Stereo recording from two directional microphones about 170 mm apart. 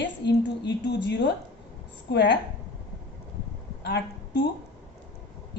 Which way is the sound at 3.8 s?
80° left.